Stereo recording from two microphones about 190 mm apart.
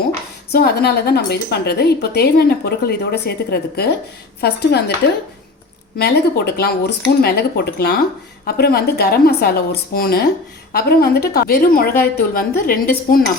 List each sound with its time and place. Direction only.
0.5 s a woman's voice: 55° left (ahead or behind)
6.0 s a woman's voice: 55° left (ahead or behind)